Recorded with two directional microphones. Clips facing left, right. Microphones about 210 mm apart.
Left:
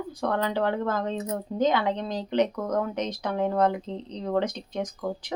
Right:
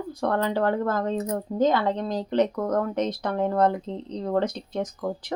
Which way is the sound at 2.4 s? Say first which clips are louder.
Right 2 dB; centre (ahead or behind).